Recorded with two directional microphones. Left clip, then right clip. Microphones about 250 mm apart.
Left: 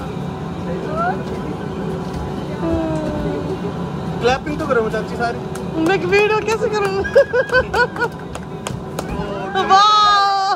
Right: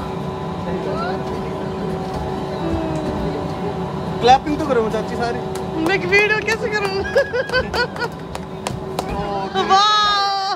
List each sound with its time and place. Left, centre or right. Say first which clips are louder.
4.2 s speech: right 5 dB; right
5.9 s speech: left 1 dB; centre
9.6 s a sound: left 3 dB; centre